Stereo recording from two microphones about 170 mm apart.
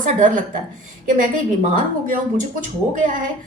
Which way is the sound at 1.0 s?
50° right (ahead or behind).